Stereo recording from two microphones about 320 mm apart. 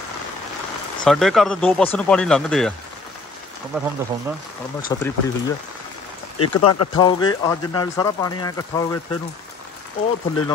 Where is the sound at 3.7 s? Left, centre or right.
Centre.